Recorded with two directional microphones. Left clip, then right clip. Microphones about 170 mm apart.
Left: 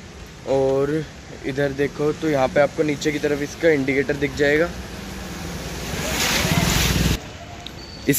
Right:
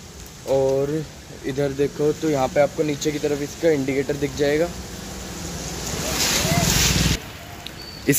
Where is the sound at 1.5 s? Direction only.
Centre (ahead or behind).